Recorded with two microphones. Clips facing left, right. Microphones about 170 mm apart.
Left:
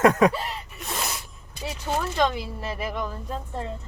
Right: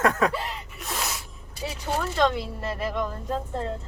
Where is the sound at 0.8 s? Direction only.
Centre (ahead or behind).